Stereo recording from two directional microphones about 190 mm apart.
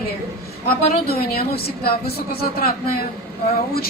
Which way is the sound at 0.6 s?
50° left (ahead or behind).